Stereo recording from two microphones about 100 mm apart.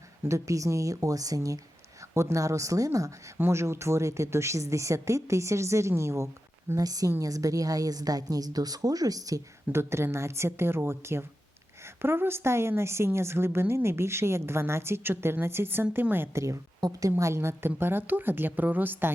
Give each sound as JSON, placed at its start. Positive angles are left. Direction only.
{"t": 0.3, "sound": "a woman's voice", "side_deg": -30}
{"t": 6.7, "sound": "a woman's voice", "side_deg": -40}